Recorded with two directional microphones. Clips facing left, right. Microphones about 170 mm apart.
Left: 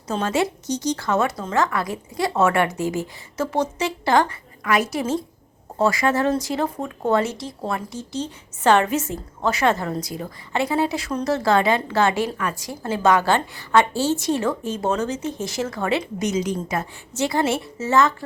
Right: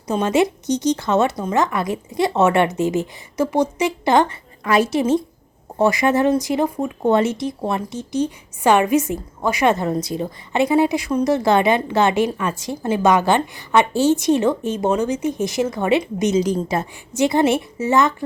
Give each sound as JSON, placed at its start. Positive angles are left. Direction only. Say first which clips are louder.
{"t": 0.1, "sound": "a woman's voice", "louder": "right 5 dB", "side_deg": -15}
{"t": 16.4, "sound": "a woman's voice", "louder": "right 5 dB", "side_deg": -35}
{"t": 17.2, "sound": "speech", "louder": "right 5 dB", "side_deg": -20}